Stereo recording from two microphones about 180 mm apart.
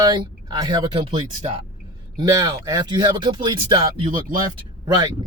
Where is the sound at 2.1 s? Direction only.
20° right (ahead or behind).